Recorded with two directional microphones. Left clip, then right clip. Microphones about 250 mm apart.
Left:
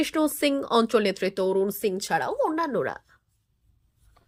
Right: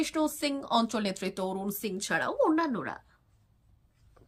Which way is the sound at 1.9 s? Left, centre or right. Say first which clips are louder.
Left 4 dB; left.